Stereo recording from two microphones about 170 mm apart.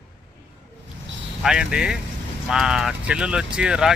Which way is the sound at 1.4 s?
5° right (ahead or behind).